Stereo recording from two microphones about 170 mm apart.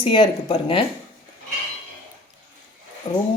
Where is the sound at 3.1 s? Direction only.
25° left (ahead or behind).